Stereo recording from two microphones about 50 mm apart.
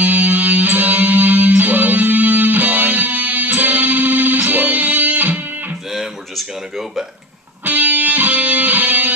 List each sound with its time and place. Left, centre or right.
0.0 s music: right
7.6 s music: right